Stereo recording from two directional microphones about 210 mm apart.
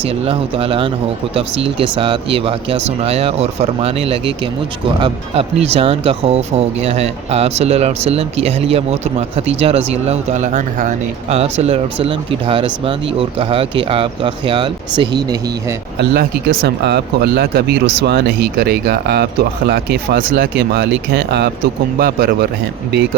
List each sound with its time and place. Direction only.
0.0 s speech: 25° right (ahead or behind)
16.0 s speech: 45° right (ahead or behind)